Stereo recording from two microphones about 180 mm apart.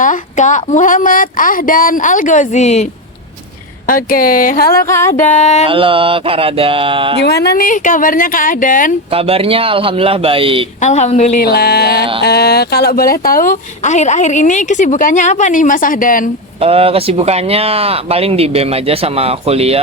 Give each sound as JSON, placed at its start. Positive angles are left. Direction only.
{"t": 0.0, "sound": "speech", "side_deg": 45}
{"t": 3.8, "sound": "speech", "side_deg": 50}
{"t": 4.9, "sound": "music", "side_deg": 15}
{"t": 5.3, "sound": "speech", "side_deg": 40}
{"t": 5.6, "sound": "a sound", "side_deg": -30}
{"t": 7.2, "sound": "speech", "side_deg": 65}
{"t": 9.0, "sound": "speech", "side_deg": -30}
{"t": 10.8, "sound": "speech", "side_deg": 40}
{"t": 11.3, "sound": "a sound", "side_deg": 60}
{"t": 12.2, "sound": "speech", "side_deg": 60}
{"t": 16.6, "sound": "speech", "side_deg": -30}